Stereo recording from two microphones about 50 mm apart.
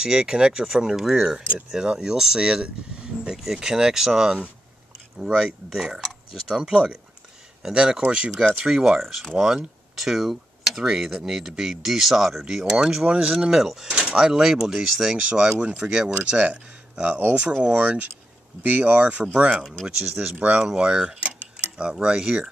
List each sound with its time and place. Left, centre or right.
0.0 s speech: centre
9.0 s speech: centre
9.3 s speech: centre
13.8 s speech: centre
17.0 s speech: right
20.6 s speech: centre